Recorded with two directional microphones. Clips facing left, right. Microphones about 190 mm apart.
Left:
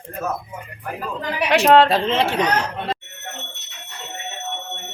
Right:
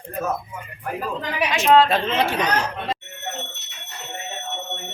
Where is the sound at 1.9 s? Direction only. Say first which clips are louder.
Left 2 dB; 30° left (ahead or behind).